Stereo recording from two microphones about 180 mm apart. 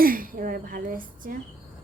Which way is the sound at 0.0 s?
50° right (ahead or behind).